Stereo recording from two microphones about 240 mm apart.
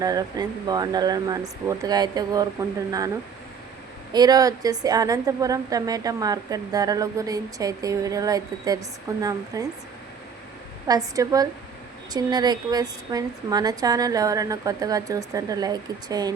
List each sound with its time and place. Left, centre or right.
0.0 s a woman's voice: centre
4.1 s a woman's voice: centre
10.8 s a woman's voice: centre